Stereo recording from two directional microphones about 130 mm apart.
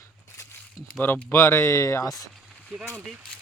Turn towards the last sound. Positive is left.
turn(degrees=0)  # may be behind; listen again after turning